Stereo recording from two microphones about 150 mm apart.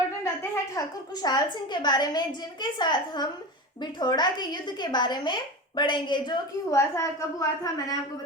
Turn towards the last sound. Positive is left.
turn(degrees=25)  # may be behind; listen again after turning